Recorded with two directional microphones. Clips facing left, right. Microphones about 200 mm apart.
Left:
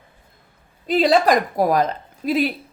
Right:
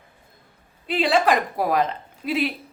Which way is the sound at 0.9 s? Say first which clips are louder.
Left 4 dB; 40° left (ahead or behind).